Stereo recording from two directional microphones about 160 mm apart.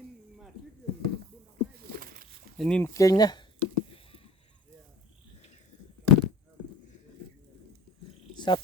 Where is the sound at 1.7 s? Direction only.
65° right (ahead or behind).